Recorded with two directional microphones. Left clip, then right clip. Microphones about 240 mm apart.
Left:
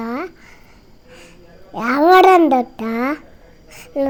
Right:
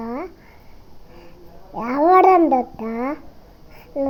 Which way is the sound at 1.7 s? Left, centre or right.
Left.